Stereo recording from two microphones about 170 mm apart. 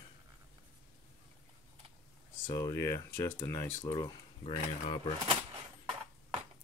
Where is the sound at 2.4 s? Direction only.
20° left (ahead or behind).